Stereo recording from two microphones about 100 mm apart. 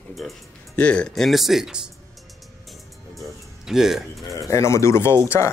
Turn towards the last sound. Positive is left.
turn(degrees=25)  # may be behind; listen again after turning